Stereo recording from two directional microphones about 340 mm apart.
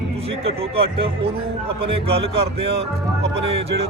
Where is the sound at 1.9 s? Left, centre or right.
Centre.